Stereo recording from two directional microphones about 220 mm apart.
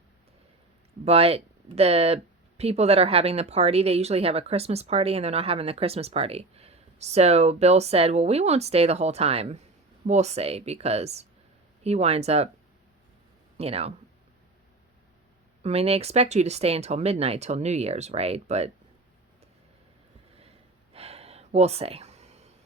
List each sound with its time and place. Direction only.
1.0 s speech: 25° right (ahead or behind)
13.6 s speech: 25° right (ahead or behind)
15.6 s speech: 30° right (ahead or behind)
20.9 s a sound: 25° right (ahead or behind)